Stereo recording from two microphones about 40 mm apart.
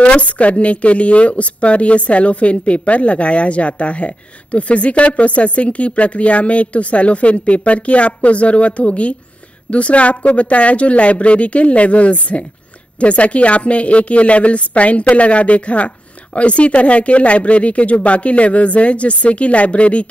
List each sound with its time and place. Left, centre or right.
0.0 s a woman's voice: left